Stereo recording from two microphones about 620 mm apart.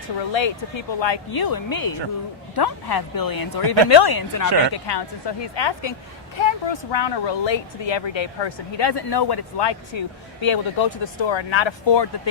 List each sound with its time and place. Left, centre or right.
0.3 s speech: left